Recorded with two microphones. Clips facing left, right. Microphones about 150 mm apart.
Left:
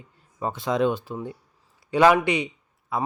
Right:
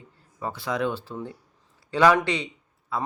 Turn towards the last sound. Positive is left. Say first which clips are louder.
# left 2 dB
turn(degrees=15)  # may be behind; listen again after turning